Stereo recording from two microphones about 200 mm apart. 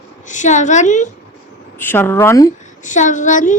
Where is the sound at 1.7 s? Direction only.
10° left (ahead or behind).